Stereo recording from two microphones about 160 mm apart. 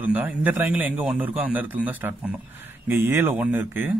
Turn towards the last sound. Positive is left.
turn(degrees=-10)  # may be behind; listen again after turning